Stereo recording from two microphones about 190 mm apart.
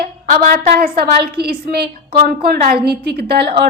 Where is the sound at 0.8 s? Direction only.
55° right (ahead or behind).